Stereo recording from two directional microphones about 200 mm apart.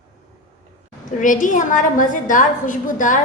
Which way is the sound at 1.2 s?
40° left (ahead or behind).